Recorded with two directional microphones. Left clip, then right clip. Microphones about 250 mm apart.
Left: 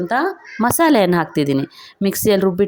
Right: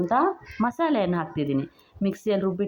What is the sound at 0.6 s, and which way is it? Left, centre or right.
Speech, left.